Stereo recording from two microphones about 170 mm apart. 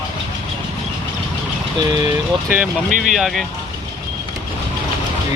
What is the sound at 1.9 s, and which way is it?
Speech, 25° right (ahead or behind).